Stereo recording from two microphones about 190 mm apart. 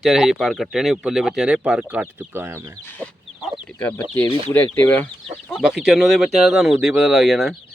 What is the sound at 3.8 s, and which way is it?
Speech, 10° left (ahead or behind).